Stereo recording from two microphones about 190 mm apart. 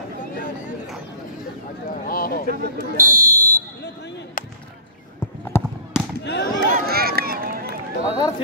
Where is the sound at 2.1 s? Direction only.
50° left (ahead or behind).